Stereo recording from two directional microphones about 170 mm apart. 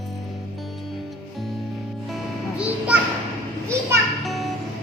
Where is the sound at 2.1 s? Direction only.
5° right (ahead or behind).